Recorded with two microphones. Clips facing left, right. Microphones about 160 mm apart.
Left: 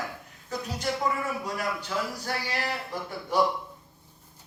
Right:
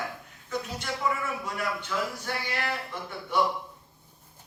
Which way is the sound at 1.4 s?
35° left (ahead or behind).